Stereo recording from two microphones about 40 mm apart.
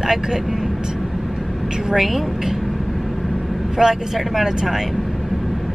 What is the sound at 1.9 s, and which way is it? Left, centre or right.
Speech, centre.